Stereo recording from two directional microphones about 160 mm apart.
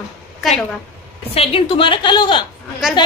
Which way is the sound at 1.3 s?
35° left (ahead or behind).